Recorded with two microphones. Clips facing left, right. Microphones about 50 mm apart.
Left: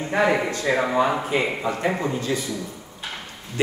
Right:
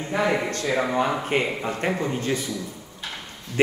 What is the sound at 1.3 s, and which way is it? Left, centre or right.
Speech, right.